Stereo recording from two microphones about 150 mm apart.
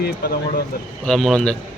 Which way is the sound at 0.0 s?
90° left.